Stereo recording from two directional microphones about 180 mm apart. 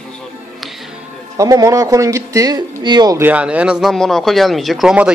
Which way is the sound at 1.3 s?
20° right (ahead or behind).